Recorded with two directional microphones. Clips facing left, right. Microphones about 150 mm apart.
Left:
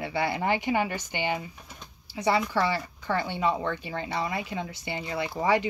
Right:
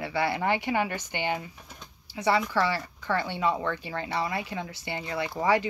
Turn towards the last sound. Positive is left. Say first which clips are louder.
# even
turn(degrees=20)  # may be behind; listen again after turning